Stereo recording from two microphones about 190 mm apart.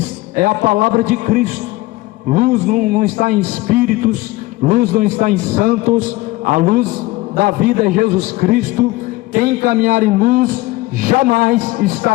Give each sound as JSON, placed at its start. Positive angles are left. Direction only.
{"t": 0.3, "sound": "a man's voice", "side_deg": -45}